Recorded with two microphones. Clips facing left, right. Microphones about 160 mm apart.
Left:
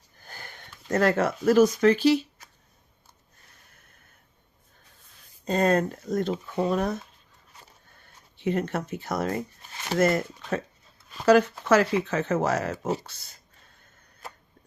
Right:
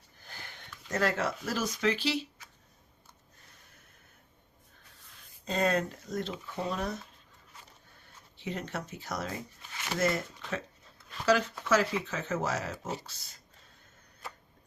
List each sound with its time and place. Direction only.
0.3 s speech: 50° left (ahead or behind)
5.5 s speech: 45° left (ahead or behind)
8.4 s speech: 55° left (ahead or behind)